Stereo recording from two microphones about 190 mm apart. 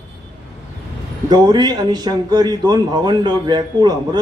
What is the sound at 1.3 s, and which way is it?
A man's voice, 20° right (ahead or behind).